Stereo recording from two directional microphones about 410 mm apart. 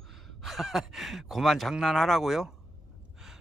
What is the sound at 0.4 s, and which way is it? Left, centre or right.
Speech, centre.